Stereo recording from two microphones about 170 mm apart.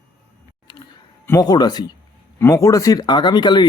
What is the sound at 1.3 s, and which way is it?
Speech, 20° left (ahead or behind).